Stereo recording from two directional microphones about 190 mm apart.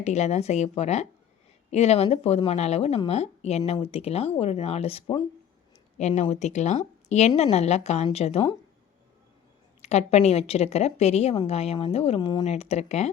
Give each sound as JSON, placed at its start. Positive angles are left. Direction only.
{"t": 0.0, "sound": "a woman's voice", "side_deg": 35}
{"t": 9.8, "sound": "a woman's voice", "side_deg": 35}
{"t": 12.5, "sound": "a woman's voice", "side_deg": 35}